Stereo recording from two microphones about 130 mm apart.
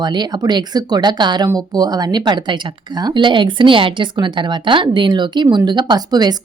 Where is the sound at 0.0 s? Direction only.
35° right (ahead or behind).